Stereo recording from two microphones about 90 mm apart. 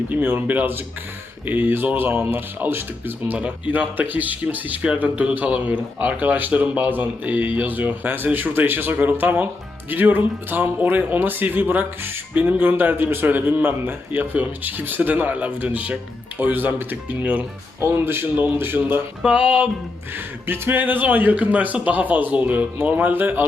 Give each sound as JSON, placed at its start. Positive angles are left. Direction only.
{"t": 0.1, "sound": "speech", "side_deg": -20}
{"t": 19.2, "sound": "music", "side_deg": -15}
{"t": 20.1, "sound": "speech", "side_deg": -20}